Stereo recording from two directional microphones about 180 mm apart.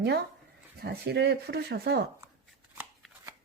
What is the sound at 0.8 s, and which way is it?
A woman's voice, 70° right (ahead or behind).